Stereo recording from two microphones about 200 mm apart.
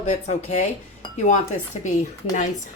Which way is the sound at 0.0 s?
35° left (ahead or behind).